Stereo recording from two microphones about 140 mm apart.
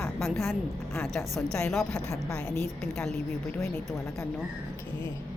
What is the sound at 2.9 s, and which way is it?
Speech, 5° left (ahead or behind).